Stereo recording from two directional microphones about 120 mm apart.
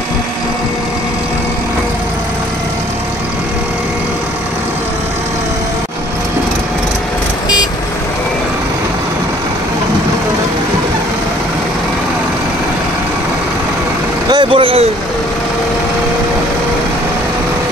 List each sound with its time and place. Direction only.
14.3 s vehicle: 45° right (ahead or behind)